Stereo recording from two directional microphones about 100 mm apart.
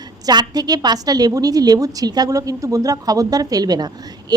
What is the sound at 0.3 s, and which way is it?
A woman's voice, 40° right (ahead or behind).